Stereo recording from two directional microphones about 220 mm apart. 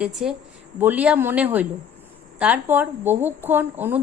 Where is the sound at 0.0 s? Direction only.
Centre (ahead or behind).